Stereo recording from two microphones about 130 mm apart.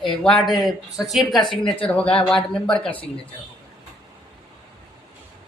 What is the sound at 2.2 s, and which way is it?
Speech, 5° left (ahead or behind).